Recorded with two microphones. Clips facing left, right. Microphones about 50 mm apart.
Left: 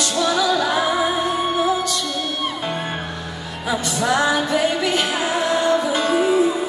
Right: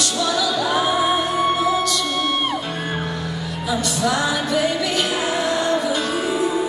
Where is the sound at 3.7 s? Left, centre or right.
Left.